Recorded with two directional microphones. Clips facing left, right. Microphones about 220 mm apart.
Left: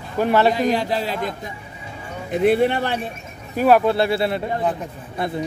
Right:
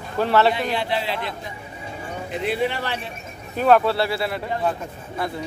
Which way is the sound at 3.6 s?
15° left (ahead or behind).